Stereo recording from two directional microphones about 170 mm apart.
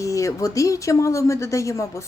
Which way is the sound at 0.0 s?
20° left (ahead or behind).